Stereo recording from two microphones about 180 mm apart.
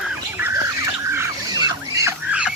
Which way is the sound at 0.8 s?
15° right (ahead or behind).